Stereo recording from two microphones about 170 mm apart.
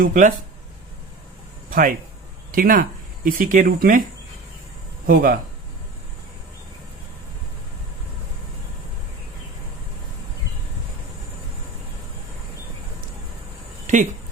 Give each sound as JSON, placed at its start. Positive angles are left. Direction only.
{"t": 0.0, "sound": "speech", "side_deg": -55}
{"t": 1.7, "sound": "speech", "side_deg": -55}
{"t": 5.0, "sound": "speech", "side_deg": -55}
{"t": 13.8, "sound": "a sound", "side_deg": -45}